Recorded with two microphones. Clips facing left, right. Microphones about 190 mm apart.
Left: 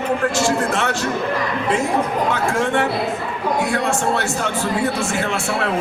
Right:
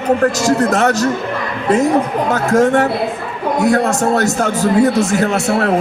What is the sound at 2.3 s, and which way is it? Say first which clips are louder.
A man's voice: right 7 dB; 40° right (ahead or behind).